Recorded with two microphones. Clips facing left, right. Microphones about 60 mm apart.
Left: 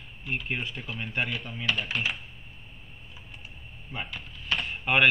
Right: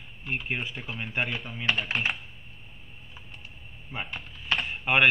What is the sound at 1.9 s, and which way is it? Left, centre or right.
Computer keyboard, right.